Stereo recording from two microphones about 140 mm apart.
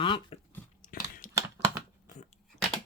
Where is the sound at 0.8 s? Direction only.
75° left (ahead or behind).